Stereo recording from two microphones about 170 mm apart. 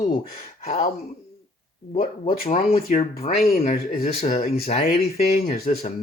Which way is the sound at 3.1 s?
40° left (ahead or behind).